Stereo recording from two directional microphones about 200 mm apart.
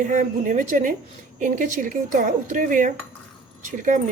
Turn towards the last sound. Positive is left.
turn(degrees=-40)  # may be behind; listen again after turning